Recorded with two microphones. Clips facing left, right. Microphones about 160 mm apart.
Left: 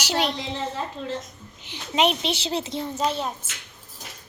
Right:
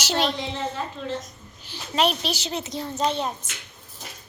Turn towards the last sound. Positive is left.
turn(degrees=5)  # may be behind; listen again after turning